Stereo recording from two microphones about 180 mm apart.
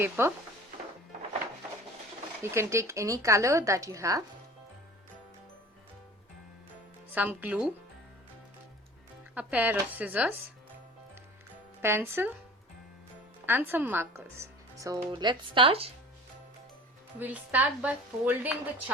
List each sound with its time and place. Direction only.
0.0 s speech: 15° right (ahead or behind)
2.4 s speech: 15° right (ahead or behind)
7.1 s speech: 10° right (ahead or behind)
9.3 s speech: 10° right (ahead or behind)
11.8 s speech: 15° right (ahead or behind)
13.4 s speech: 10° right (ahead or behind); by 15.9 s 30° right (ahead or behind)
17.2 s speech: 10° right (ahead or behind)